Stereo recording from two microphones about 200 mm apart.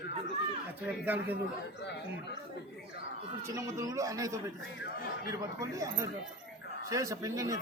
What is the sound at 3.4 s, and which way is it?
Speech, 15° right (ahead or behind).